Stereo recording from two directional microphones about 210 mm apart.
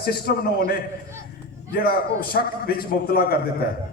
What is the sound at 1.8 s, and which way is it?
A man's voice, 45° left (ahead or behind).